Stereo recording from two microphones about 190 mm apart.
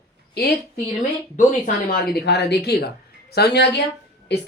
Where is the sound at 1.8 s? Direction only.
55° left (ahead or behind).